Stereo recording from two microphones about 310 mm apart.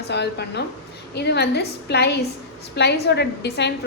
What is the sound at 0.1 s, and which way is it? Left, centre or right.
A woman's voice, left.